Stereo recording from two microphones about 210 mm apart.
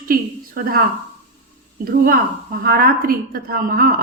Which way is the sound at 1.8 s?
40° right (ahead or behind).